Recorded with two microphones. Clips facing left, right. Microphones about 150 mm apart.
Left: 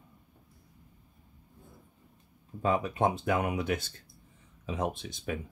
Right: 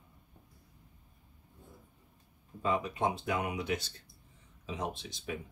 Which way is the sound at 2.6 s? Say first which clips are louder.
Left 4 dB; 55° left (ahead or behind).